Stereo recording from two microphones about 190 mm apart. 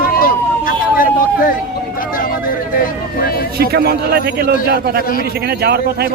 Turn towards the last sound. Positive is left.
turn(degrees=-55)  # may be behind; listen again after turning